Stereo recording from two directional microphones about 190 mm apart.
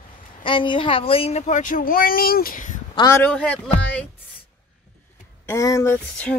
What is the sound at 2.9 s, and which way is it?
Speech, 15° left (ahead or behind).